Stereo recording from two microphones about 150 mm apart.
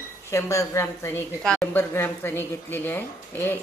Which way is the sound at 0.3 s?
20° left (ahead or behind).